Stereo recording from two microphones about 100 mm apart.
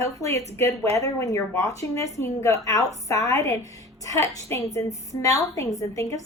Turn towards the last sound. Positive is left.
turn(degrees=30)  # may be behind; listen again after turning